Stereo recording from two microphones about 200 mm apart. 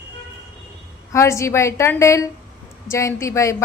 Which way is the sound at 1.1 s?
15° left (ahead or behind).